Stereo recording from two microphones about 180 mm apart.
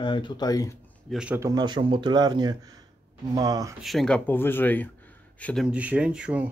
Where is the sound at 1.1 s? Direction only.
5° right (ahead or behind).